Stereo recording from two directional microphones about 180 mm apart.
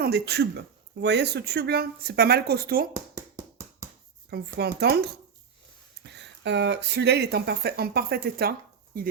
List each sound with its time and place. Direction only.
0.0 s speech: 65° right (ahead or behind)
2.9 s hands: 15° right (ahead or behind)
4.3 s speech: 60° right (ahead or behind)